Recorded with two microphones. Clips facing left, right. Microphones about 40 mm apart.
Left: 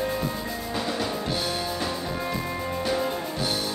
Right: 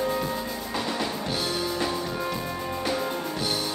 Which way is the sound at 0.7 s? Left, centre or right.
Centre.